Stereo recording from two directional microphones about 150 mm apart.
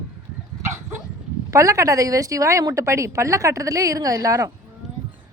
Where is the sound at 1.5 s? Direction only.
20° right (ahead or behind).